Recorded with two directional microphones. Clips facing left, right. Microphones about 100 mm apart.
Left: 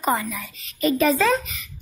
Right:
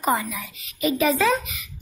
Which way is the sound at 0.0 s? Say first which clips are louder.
Even; 20° right (ahead or behind).